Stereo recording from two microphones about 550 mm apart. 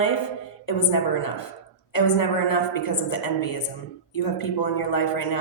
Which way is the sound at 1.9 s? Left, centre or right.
Left.